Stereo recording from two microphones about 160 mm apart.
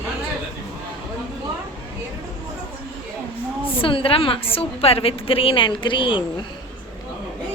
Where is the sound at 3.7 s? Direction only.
35° left (ahead or behind).